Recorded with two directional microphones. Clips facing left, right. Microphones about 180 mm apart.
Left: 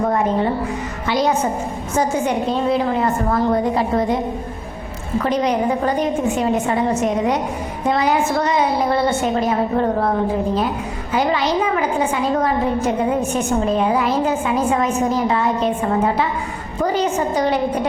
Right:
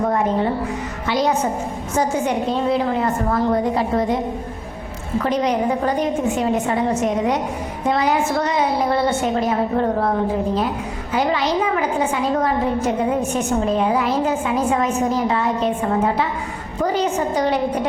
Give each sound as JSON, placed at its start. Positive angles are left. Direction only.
{"t": 0.0, "sound": "a woman's voice", "side_deg": 25}
{"t": 5.2, "sound": "a woman's voice", "side_deg": 20}